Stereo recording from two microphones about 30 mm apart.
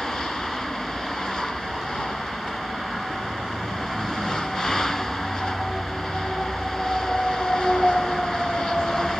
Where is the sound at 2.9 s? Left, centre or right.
Centre.